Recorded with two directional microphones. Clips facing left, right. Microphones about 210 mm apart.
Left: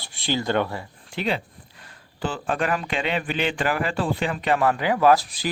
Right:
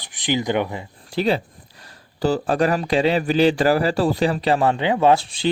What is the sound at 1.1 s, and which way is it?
Speech, 35° right (ahead or behind).